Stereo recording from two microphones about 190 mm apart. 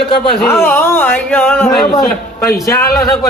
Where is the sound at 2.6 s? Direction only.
15° left (ahead or behind).